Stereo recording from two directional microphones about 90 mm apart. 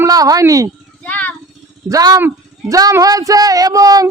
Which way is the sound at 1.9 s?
40° right (ahead or behind).